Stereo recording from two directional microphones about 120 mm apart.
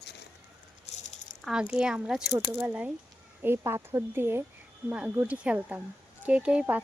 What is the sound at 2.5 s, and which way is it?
A woman's voice, 15° right (ahead or behind).